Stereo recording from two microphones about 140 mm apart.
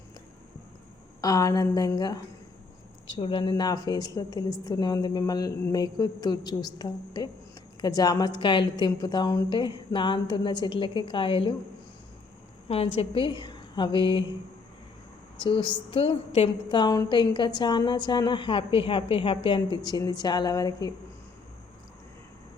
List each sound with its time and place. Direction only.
1.2 s a woman's voice: 25° left (ahead or behind)
12.6 s a woman's voice: 45° left (ahead or behind)
15.4 s a woman's voice: 35° left (ahead or behind)